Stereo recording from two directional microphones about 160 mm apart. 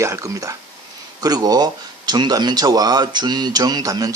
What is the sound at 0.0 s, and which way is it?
Speech, 20° right (ahead or behind).